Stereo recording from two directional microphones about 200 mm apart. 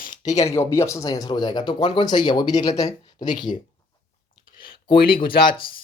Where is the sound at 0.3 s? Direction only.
35° left (ahead or behind).